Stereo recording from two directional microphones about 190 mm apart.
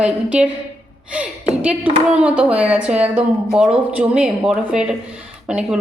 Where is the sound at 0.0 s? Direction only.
5° right (ahead or behind).